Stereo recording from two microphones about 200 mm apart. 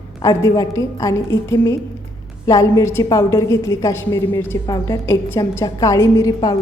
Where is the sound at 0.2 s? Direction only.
15° left (ahead or behind).